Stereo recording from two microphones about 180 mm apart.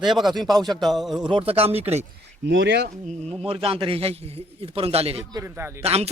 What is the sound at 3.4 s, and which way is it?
A man's voice, 30° right (ahead or behind).